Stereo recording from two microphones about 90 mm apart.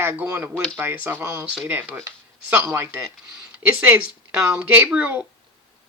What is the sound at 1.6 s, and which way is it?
Speech, 20° right (ahead or behind).